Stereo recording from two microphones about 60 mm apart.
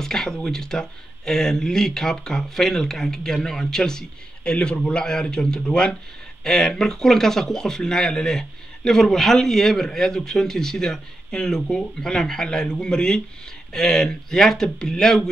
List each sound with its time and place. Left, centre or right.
0.0 s speech: centre